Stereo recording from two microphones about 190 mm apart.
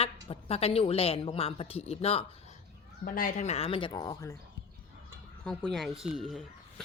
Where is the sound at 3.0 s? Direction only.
45° left (ahead or behind); by 4.4 s 20° left (ahead or behind).